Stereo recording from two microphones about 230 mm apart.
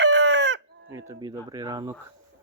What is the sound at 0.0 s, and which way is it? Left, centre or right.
Chicken, right.